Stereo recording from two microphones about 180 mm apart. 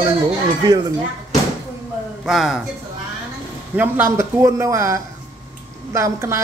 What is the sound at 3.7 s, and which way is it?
A woman's voice, 10° right (ahead or behind).